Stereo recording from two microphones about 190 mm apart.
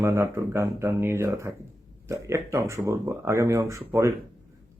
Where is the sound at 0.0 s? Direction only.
15° right (ahead or behind).